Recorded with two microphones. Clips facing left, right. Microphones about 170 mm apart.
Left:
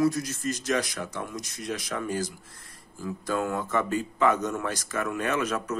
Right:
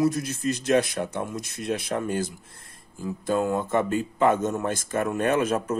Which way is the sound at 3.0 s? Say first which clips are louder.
Right 4 dB; 20° right (ahead or behind).